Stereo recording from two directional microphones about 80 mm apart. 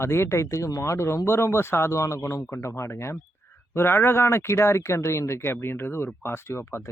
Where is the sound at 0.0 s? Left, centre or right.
Left.